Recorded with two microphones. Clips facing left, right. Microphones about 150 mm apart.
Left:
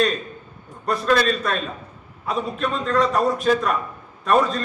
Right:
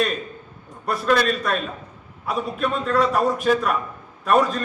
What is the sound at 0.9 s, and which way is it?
A man's voice, 5° right (ahead or behind).